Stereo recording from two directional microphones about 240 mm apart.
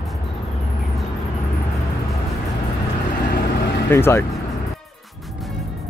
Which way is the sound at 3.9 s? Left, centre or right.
Centre.